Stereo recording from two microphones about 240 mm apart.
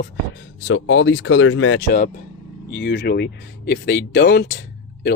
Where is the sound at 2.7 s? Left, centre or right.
Left.